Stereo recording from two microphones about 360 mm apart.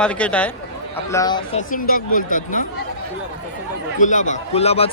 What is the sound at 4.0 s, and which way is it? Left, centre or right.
Speech, left.